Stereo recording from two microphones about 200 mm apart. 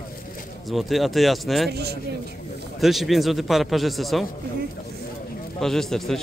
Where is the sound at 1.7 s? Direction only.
55° right (ahead or behind).